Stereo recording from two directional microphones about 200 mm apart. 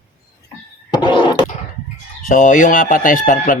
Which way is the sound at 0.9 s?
20° left (ahead or behind).